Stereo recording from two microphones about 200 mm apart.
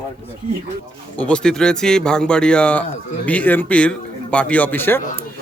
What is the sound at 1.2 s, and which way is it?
Speech, 5° left (ahead or behind).